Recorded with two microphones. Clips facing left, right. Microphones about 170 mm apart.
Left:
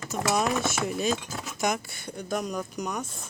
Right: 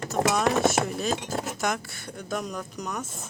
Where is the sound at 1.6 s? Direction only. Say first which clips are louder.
Left 1 dB; centre (ahead or behind).